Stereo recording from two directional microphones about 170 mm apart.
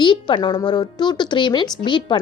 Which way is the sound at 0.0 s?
25° left (ahead or behind).